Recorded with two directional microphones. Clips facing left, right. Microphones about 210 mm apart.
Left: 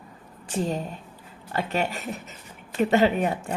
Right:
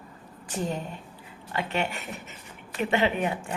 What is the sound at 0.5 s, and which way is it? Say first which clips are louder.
Speech: left 3 dB; 30° left (ahead or behind).